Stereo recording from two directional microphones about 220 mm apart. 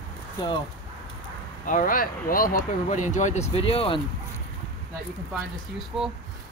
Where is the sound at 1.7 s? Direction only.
40° left (ahead or behind).